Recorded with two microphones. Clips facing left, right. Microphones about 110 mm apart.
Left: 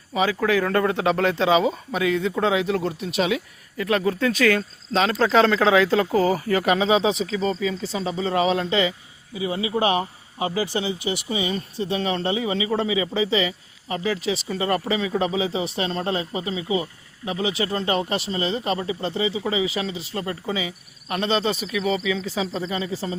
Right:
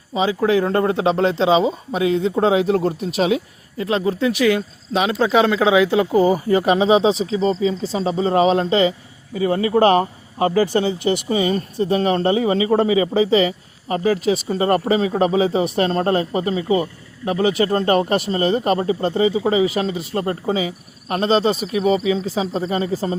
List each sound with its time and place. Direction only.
0.1 s speech: 25° right (ahead or behind); by 23.1 s 45° right (ahead or behind)